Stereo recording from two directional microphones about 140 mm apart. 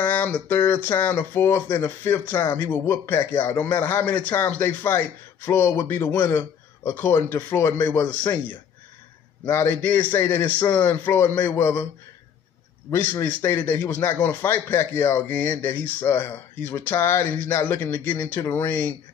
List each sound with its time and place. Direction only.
0.0 s speech: 15° left (ahead or behind)
9.5 s speech: 15° left (ahead or behind)
12.9 s speech: 15° left (ahead or behind)